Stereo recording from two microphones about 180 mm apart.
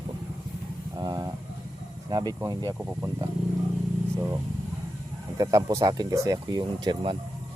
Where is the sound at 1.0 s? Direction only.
20° right (ahead or behind).